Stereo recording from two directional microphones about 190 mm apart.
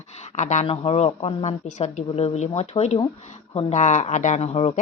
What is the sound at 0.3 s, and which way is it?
Speech, 40° left (ahead or behind).